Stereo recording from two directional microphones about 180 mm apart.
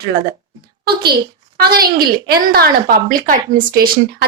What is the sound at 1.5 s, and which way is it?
A woman's voice, 60° right (ahead or behind).